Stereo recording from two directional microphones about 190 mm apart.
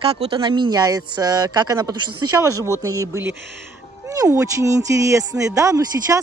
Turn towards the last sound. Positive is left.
turn(degrees=-15)  # may be behind; listen again after turning